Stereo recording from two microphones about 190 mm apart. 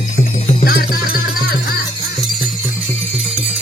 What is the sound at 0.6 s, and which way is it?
Music, 50° left (ahead or behind).